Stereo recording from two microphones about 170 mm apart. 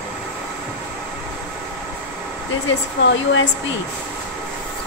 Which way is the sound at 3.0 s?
90° left.